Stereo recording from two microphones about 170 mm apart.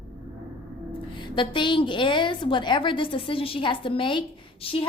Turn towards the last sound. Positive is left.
turn(degrees=30)  # may be behind; listen again after turning